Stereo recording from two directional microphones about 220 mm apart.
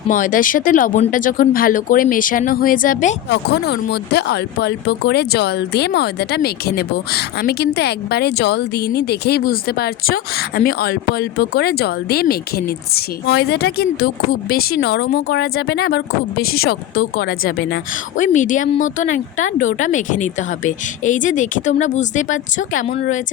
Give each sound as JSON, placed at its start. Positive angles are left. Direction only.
{"t": 0.1, "sound": "a woman's voice", "side_deg": 35}
{"t": 3.2, "sound": "a woman's voice", "side_deg": 50}